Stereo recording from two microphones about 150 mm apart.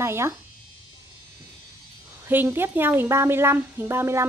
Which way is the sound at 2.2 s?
15° right (ahead or behind).